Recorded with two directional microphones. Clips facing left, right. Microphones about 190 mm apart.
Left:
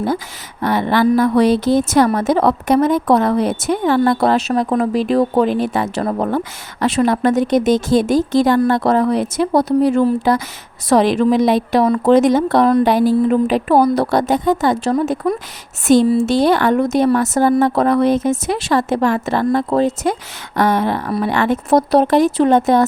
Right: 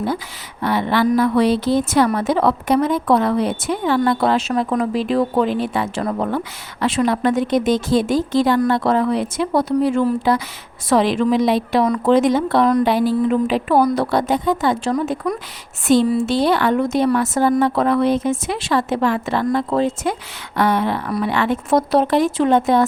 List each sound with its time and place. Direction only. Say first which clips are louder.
0.6 s a woman's voice: left 3 dB; 45° left (ahead or behind)